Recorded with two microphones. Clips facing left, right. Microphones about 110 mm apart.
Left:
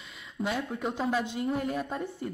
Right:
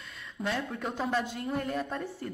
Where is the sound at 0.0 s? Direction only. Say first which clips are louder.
Left 2 dB; 5° left (ahead or behind).